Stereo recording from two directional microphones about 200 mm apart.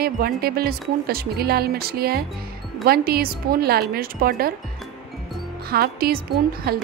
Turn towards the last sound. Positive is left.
turn(degrees=-50)  # may be behind; listen again after turning